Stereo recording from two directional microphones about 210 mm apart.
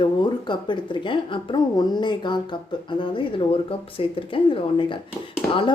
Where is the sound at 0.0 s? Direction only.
20° left (ahead or behind).